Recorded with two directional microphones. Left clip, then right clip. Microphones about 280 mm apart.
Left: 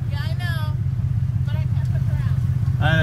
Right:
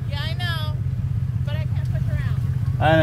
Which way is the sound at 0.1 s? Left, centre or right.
Right.